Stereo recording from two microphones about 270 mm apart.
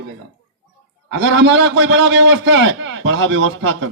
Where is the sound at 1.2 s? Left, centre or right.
Right.